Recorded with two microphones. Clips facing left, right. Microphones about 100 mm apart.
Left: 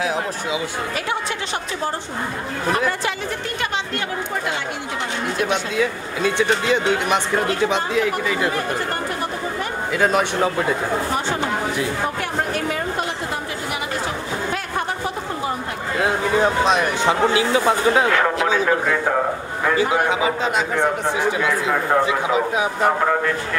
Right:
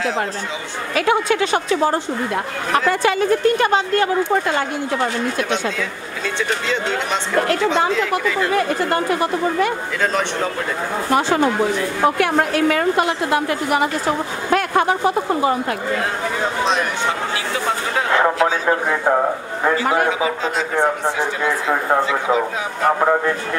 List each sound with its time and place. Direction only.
0.9 s a woman's voice: 90° right
3.0 s a woman's voice: 50° right (ahead or behind)
6.2 s speech: 15° left (ahead or behind)
8.5 s a woman's voice: 90° right
9.9 s speech: 10° left (ahead or behind)
12.2 s a woman's voice: 90° right
14.5 s a woman's voice: 85° right
16.6 s speech: 15° left (ahead or behind)
18.1 s a man's voice: 25° right (ahead or behind)